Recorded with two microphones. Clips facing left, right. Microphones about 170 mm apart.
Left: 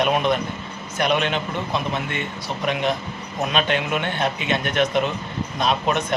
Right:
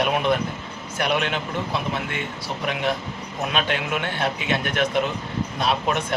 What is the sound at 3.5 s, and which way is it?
Speech, 5° right (ahead or behind).